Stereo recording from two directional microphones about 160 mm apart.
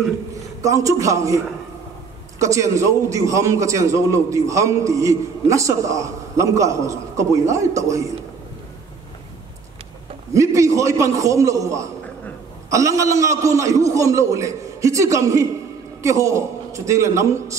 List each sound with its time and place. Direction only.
0.6 s a man's voice: 20° right (ahead or behind)
10.3 s a man's voice: 20° right (ahead or behind)